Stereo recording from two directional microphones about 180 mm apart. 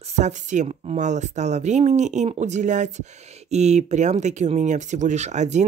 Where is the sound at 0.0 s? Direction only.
40° right (ahead or behind).